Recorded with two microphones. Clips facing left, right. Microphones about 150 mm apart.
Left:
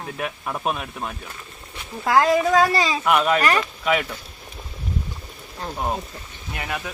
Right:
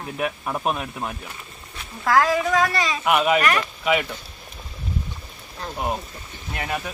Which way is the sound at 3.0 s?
5° right (ahead or behind).